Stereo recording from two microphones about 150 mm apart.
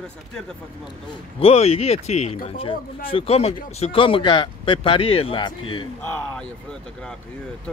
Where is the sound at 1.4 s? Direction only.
45° left (ahead or behind).